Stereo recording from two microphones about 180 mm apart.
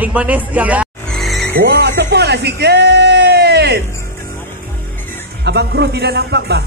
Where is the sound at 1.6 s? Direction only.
65° right (ahead or behind).